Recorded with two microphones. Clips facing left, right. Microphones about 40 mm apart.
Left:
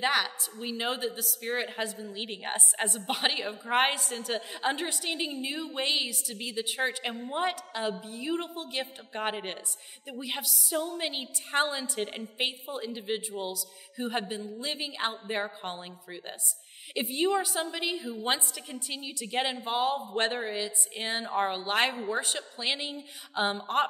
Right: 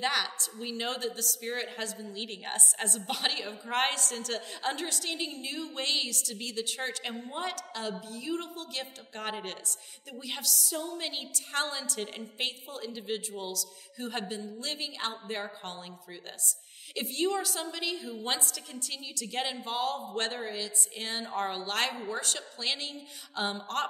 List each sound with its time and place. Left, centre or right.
0.0 s a woman's voice: centre